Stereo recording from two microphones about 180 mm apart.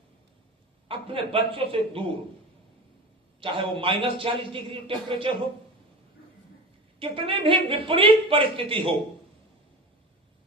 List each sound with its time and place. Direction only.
0.9 s a man's voice: 30° right (ahead or behind)
3.4 s a man's voice: 30° right (ahead or behind)
7.0 s a man's voice: 30° right (ahead or behind)